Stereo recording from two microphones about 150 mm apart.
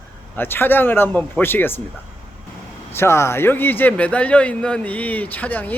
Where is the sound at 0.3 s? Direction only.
15° left (ahead or behind).